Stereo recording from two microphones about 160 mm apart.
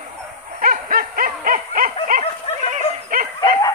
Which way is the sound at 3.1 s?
60° right (ahead or behind).